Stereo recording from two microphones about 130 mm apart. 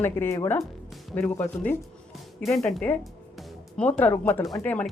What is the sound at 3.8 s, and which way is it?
Speech, 10° left (ahead or behind).